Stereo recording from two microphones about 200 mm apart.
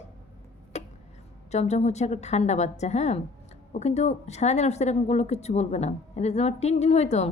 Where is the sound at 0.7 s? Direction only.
35° left (ahead or behind).